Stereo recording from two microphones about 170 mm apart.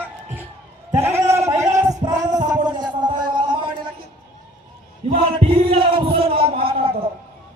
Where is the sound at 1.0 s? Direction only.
15° right (ahead or behind).